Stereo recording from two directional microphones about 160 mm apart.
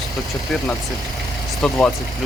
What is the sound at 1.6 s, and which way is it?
Speech, 5° left (ahead or behind).